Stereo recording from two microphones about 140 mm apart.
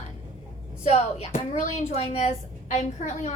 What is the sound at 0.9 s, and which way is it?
A woman's voice, 50° left (ahead or behind).